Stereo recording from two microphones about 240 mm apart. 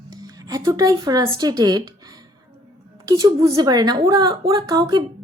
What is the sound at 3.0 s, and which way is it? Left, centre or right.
A woman's voice, centre.